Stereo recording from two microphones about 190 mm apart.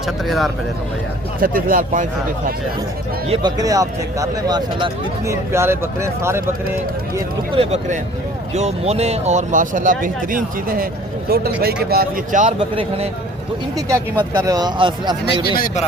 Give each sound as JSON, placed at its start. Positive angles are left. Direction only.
{"t": 0.0, "sound": "speech", "side_deg": 0}
{"t": 1.4, "sound": "speech", "side_deg": -50}
{"t": 3.2, "sound": "speech", "side_deg": -20}
{"t": 7.5, "sound": "speech", "side_deg": -30}
{"t": 12.5, "sound": "speech", "side_deg": -30}
{"t": 13.7, "sound": "speech", "side_deg": -15}
{"t": 15.5, "sound": "speech", "side_deg": 45}